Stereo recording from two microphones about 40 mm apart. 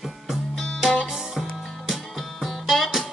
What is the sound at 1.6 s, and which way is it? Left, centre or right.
Music, centre.